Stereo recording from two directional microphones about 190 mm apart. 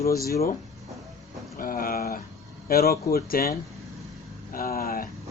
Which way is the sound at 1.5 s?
50° left (ahead or behind).